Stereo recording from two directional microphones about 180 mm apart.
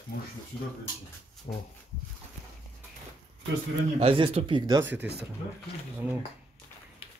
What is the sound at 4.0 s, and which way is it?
Speech, 30° right (ahead or behind).